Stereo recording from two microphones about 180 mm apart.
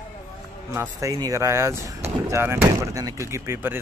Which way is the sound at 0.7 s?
20° right (ahead or behind).